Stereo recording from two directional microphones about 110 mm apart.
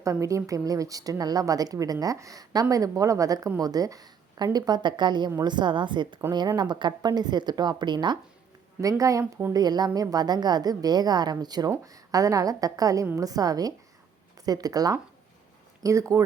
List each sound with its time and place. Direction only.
0.0 s a woman's voice: 30° right (ahead or behind)
8.8 s a woman's voice: 30° right (ahead or behind)